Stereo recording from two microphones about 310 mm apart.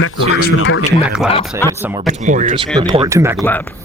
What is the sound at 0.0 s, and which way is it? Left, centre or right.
Speech, left.